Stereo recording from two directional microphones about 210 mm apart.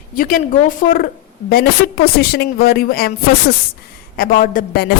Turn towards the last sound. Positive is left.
turn(degrees=45)  # may be behind; listen again after turning